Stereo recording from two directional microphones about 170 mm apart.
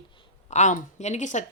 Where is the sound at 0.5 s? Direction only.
45° left (ahead or behind).